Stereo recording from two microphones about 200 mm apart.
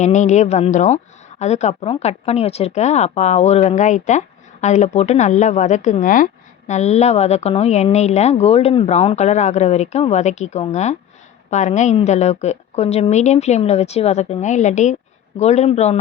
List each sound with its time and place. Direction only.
0.0 s speech: 35° left (ahead or behind)